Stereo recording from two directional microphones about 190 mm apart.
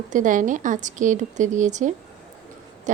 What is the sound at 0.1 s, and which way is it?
Speech, 45° right (ahead or behind).